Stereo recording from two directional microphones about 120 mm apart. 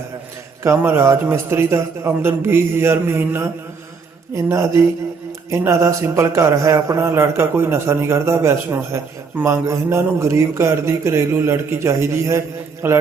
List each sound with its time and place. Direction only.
0.6 s a man's voice: 20° right (ahead or behind)